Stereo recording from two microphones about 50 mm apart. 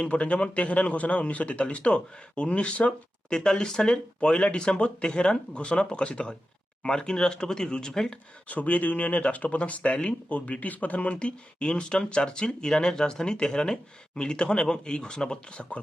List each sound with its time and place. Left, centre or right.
0.0 s speech: left
8.4 s speech: left; by 15.6 s centre